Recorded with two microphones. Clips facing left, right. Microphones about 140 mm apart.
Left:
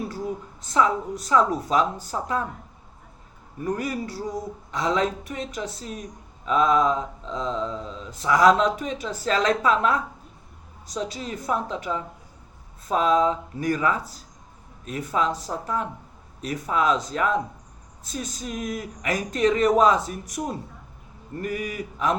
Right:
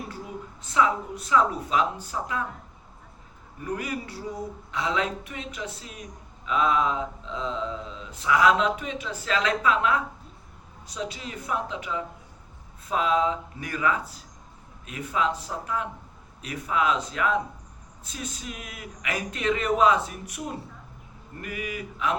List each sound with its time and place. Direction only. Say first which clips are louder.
0.6 s mantra: left 2 dB; 40° left (ahead or behind)
3.6 s mantra: left 4 dB; 40° left (ahead or behind)
21.4 s mantra: left 4 dB; 40° left (ahead or behind)